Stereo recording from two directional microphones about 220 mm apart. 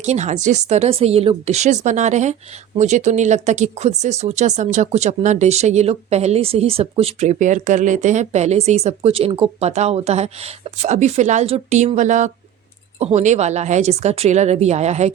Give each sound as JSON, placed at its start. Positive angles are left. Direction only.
{"t": 0.0, "sound": "speech", "side_deg": -30}